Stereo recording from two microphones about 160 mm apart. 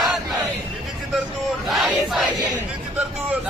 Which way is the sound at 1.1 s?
Centre (ahead or behind).